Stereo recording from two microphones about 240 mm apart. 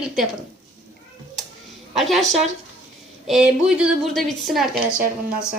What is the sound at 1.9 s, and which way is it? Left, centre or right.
A woman's voice, centre.